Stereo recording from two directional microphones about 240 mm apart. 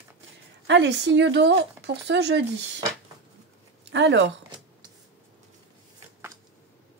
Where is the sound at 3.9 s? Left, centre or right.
Right.